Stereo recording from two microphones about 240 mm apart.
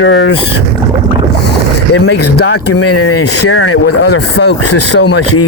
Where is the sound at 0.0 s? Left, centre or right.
Left.